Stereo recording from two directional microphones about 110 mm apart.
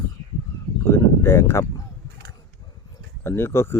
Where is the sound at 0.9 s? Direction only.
25° left (ahead or behind).